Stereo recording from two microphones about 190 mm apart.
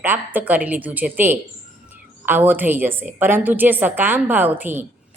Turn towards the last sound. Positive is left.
turn(degrees=-10)  # may be behind; listen again after turning